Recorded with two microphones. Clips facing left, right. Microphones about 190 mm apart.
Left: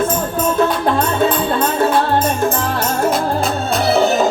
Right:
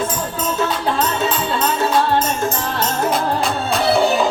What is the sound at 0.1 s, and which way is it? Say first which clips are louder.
Music: left 5 dB; 55° left (ahead or behind).